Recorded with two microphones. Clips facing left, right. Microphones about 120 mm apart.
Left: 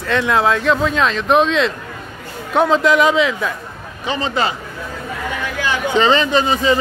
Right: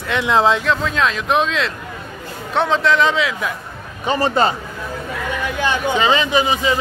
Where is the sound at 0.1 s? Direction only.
15° right (ahead or behind).